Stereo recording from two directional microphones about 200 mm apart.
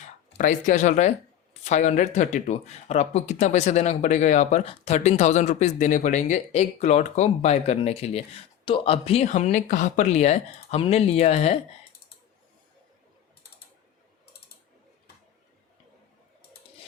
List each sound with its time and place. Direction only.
0.0 s speech: 40° left (ahead or behind)